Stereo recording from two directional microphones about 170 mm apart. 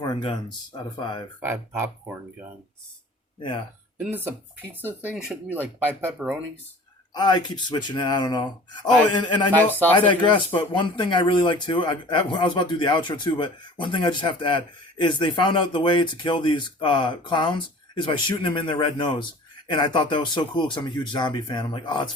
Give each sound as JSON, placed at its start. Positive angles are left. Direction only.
{"t": 0.0, "sound": "a man's voice", "side_deg": 25}
{"t": 1.4, "sound": "speech", "side_deg": -15}
{"t": 3.9, "sound": "speech", "side_deg": -10}
{"t": 7.1, "sound": "a man's voice", "side_deg": 25}
{"t": 9.8, "sound": "speech", "side_deg": 10}
{"t": 10.1, "sound": "a man's voice", "side_deg": 30}